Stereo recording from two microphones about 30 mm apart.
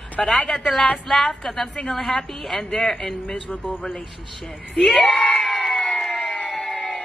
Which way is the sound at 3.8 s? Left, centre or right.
Left.